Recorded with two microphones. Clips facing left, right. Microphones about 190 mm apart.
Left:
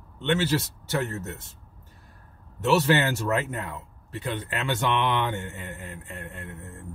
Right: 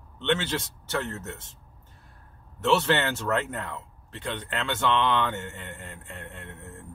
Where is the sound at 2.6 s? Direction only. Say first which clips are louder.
Left 2 dB; 10° left (ahead or behind).